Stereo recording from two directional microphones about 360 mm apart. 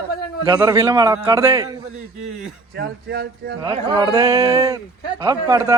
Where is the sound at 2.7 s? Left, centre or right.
Right.